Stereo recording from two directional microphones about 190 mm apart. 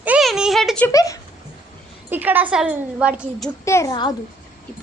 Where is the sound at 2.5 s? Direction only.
5° right (ahead or behind).